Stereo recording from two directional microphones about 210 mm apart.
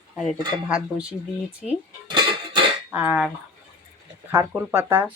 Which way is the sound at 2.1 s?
20° right (ahead or behind).